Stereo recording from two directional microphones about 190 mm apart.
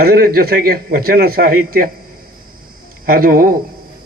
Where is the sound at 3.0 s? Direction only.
50° right (ahead or behind).